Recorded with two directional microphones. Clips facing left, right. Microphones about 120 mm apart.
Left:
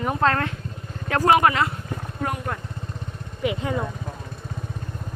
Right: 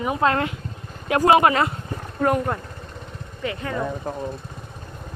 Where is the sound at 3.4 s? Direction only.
15° left (ahead or behind).